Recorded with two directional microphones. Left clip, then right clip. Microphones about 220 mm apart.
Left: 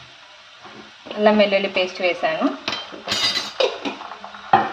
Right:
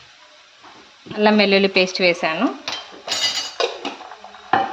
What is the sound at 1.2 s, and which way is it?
A woman's voice, 45° right (ahead or behind).